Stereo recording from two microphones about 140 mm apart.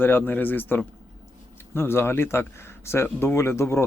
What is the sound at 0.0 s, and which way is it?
Speech, 15° left (ahead or behind).